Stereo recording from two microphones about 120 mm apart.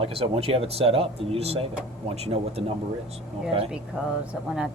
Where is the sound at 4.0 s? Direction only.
10° right (ahead or behind).